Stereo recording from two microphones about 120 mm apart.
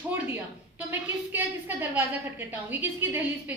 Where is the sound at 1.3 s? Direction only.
15° right (ahead or behind).